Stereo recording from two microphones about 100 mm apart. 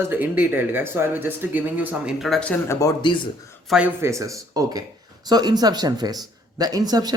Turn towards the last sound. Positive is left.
turn(degrees=-40)  # may be behind; listen again after turning